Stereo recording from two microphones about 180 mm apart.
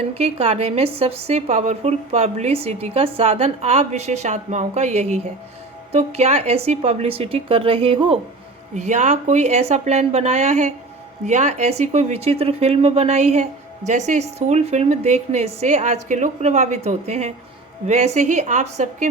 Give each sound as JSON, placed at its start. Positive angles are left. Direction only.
{"t": 0.1, "sound": "speech", "side_deg": -35}
{"t": 8.7, "sound": "speech", "side_deg": -40}